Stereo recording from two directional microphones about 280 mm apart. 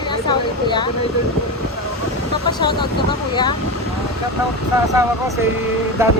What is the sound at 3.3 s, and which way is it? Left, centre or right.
Speech, centre.